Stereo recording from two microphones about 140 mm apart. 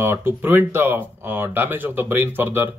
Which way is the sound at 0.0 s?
15° right (ahead or behind).